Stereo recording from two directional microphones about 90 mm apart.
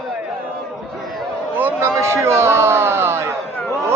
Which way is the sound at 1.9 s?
30° right (ahead or behind).